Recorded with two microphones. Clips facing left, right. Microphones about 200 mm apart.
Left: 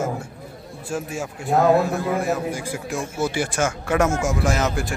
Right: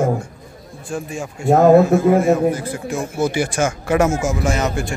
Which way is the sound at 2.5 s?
10° left (ahead or behind).